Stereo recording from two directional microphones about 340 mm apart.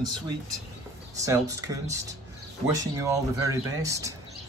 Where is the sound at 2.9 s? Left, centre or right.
Centre.